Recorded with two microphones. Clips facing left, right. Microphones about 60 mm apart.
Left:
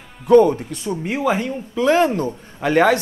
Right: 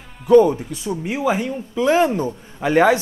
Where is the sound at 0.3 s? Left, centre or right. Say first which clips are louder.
Even; centre.